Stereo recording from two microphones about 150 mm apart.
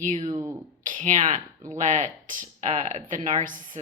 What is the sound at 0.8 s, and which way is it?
Speech, 55° right (ahead or behind).